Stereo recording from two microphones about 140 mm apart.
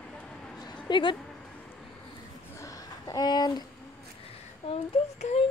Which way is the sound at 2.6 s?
25° left (ahead or behind).